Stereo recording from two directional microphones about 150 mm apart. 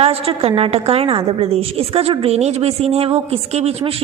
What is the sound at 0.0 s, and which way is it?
A woman's voice, 40° right (ahead or behind).